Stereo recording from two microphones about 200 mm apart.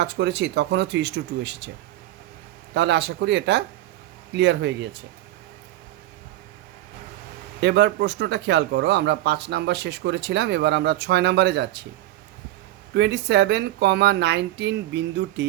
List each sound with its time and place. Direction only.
0.0 s speech: 60° right (ahead or behind)
2.7 s speech: 60° right (ahead or behind)
7.6 s speech: 60° right (ahead or behind)
12.9 s speech: 60° right (ahead or behind)